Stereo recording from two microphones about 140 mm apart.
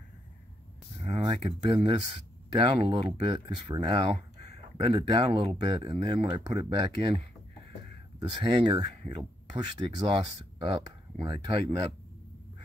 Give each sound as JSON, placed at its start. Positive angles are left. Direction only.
{"t": 1.7, "sound": "speech", "side_deg": -50}
{"t": 8.2, "sound": "speech", "side_deg": -30}